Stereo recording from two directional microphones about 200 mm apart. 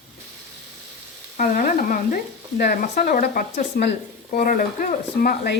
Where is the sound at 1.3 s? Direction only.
45° left (ahead or behind).